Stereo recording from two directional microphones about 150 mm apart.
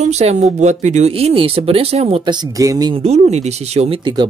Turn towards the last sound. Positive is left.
turn(degrees=-35)  # may be behind; listen again after turning